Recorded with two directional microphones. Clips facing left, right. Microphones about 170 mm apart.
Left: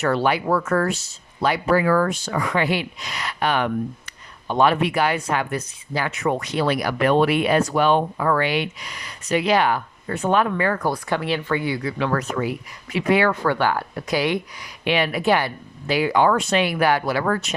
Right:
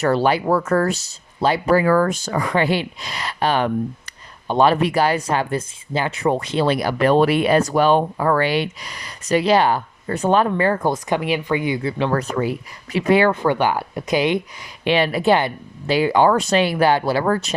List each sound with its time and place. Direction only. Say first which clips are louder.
0.0 s speech: right 3 dB; 35° right (ahead or behind)